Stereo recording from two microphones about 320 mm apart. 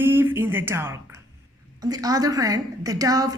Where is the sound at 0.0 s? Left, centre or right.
Centre.